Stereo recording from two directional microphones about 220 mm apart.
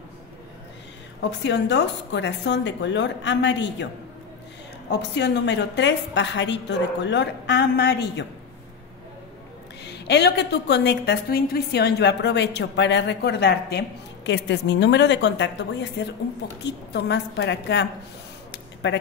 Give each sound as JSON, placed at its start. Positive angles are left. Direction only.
{"t": 1.2, "sound": "a woman's voice", "side_deg": 55}
{"t": 4.9, "sound": "a woman's voice", "side_deg": 50}
{"t": 9.8, "sound": "a woman's voice", "side_deg": 50}
{"t": 18.5, "sound": "a sound", "side_deg": 55}